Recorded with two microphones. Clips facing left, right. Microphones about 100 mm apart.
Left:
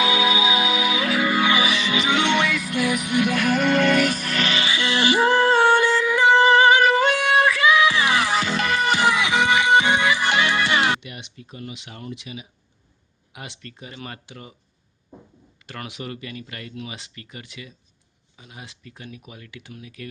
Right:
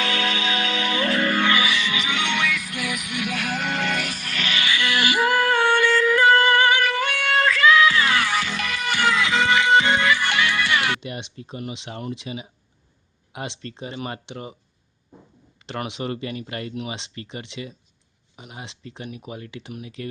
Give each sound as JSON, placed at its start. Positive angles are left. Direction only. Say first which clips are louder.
{"t": 0.0, "sound": "music", "louder": "left 5 dB", "side_deg": 10}
{"t": 1.5, "sound": "music", "louder": "left 2 dB", "side_deg": 20}
{"t": 3.2, "sound": "music", "louder": "left 8 dB", "side_deg": 50}
{"t": 4.4, "sound": "music", "louder": "right 1 dB", "side_deg": 30}
{"t": 11.0, "sound": "speech", "louder": "right 6 dB", "side_deg": -30}
{"t": 15.6, "sound": "speech", "louder": "right 5 dB", "side_deg": -25}